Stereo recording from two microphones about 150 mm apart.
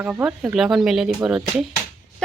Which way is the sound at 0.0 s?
10° right (ahead or behind).